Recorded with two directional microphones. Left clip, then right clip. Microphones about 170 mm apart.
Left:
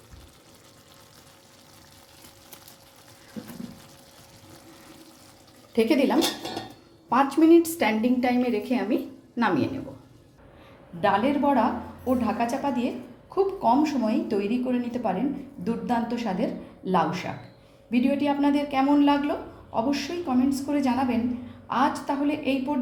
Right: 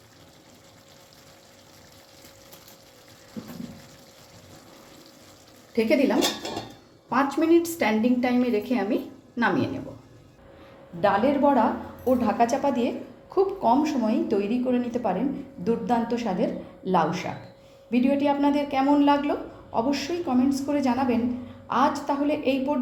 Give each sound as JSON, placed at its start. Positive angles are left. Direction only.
{"t": 5.7, "sound": "a woman's voice", "side_deg": 20}
{"t": 11.0, "sound": "a woman's voice", "side_deg": 0}
{"t": 12.2, "sound": "a woman's voice", "side_deg": -15}
{"t": 13.3, "sound": "a woman's voice", "side_deg": 0}